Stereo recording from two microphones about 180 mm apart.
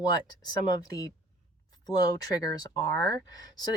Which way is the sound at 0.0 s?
20° left (ahead or behind).